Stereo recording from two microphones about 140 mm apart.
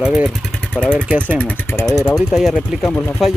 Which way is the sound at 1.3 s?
10° left (ahead or behind).